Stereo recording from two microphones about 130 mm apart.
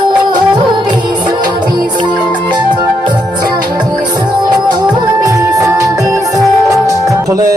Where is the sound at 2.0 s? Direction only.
35° right (ahead or behind).